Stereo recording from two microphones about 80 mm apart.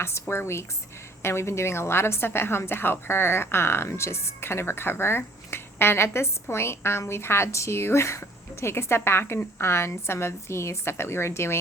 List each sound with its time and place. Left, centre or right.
0.0 s a woman's voice: left